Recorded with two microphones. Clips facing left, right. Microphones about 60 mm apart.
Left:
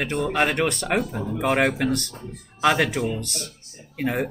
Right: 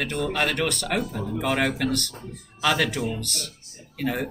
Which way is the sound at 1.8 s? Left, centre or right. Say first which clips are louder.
Left 2 dB; left.